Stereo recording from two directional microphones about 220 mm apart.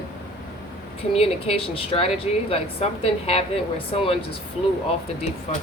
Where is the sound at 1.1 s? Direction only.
25° left (ahead or behind).